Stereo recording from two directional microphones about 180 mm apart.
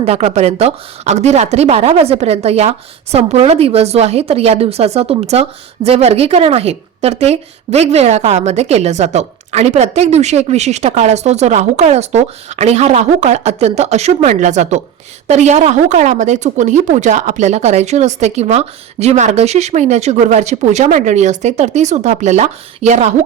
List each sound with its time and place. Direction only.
0.0 s speech: 35° right (ahead or behind)